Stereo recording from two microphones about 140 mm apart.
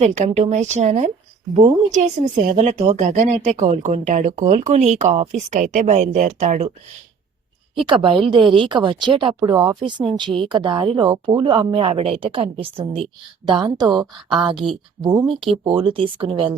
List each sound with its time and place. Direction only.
0.0 s a woman's voice: 50° right (ahead or behind)
7.9 s speech: 40° right (ahead or behind)
15.0 s speech: 25° right (ahead or behind)
15.6 s speech: 40° right (ahead or behind)